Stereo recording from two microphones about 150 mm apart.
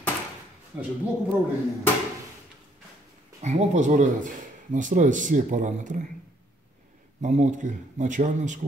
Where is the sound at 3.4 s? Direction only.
50° right (ahead or behind).